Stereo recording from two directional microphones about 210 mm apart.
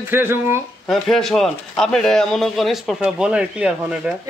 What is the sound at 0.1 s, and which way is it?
Speech, 10° right (ahead or behind).